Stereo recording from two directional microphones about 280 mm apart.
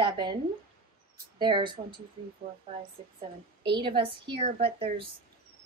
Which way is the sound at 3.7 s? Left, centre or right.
Centre.